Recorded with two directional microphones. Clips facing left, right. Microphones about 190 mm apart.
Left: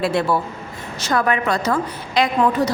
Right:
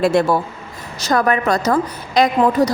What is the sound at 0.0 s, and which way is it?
A woman's voice, 45° right (ahead or behind).